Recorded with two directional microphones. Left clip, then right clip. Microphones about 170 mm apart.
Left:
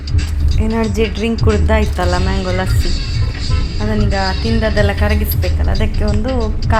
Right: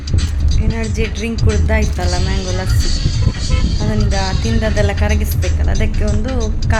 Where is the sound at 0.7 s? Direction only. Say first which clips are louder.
Left 6 dB; 25° left (ahead or behind).